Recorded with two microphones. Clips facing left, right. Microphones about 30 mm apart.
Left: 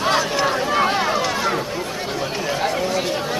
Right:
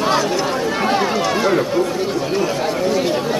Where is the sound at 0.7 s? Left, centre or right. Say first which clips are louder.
Right 2 dB; centre.